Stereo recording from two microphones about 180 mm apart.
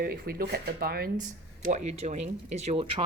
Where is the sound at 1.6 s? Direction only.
40° right (ahead or behind).